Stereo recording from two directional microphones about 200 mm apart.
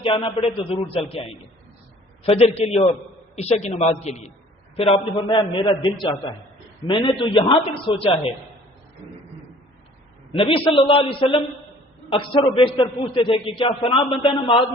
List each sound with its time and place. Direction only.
0.0 s a man's voice: 30° left (ahead or behind)
2.2 s a man's voice: 30° left (ahead or behind)
10.3 s a man's voice: 25° left (ahead or behind)